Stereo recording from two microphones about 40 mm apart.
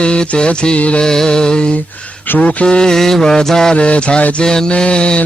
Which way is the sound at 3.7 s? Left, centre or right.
Left.